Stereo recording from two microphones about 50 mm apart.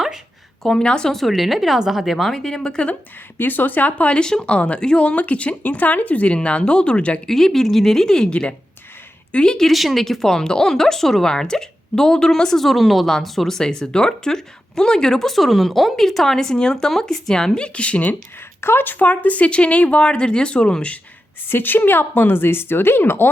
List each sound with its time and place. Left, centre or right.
0.6 s speech: centre
1.1 s speech: centre
3.3 s speech: left
4.2 s speech: centre
7.3 s speech: centre
8.3 s speech: left
9.6 s speech: centre; by 18.2 s left
18.6 s speech: left; by 20.9 s centre
21.4 s speech: left